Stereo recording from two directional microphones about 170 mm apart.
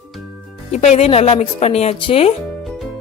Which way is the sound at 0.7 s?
40° left (ahead or behind).